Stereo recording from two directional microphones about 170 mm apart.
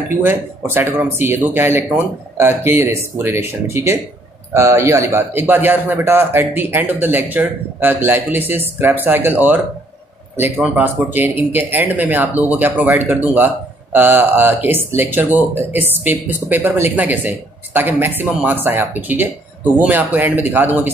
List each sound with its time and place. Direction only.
0.2 s speech: 15° right (ahead or behind)